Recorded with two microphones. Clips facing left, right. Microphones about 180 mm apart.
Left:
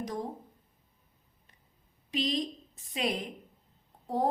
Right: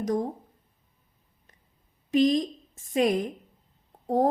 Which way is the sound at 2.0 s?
45° right (ahead or behind).